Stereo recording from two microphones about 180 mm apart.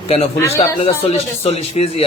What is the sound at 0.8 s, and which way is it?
Speech, 30° left (ahead or behind).